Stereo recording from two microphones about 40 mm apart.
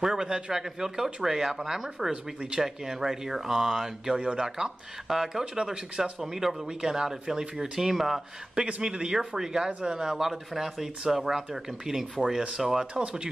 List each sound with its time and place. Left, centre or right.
0.0 s a man's voice: centre
7.9 s speech: centre
8.8 s a man's voice: right
12.9 s a man's voice: right